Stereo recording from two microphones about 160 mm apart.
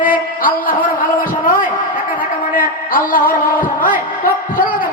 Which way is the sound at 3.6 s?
60° left (ahead or behind).